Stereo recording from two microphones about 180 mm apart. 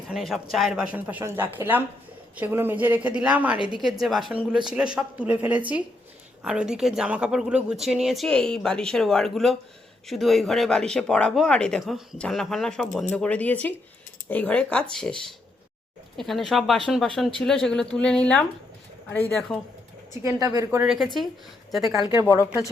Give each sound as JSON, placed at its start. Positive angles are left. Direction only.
{"t": 0.1, "sound": "a woman's voice", "side_deg": 0}
{"t": 20.2, "sound": "a woman's voice", "side_deg": -20}
{"t": 20.8, "sound": "speech", "side_deg": 0}
{"t": 22.2, "sound": "speech", "side_deg": 15}